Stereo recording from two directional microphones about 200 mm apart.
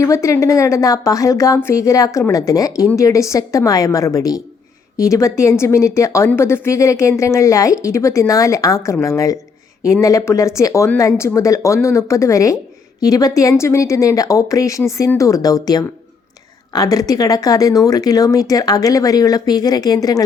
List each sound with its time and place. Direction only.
0.0 s speech: 15° left (ahead or behind)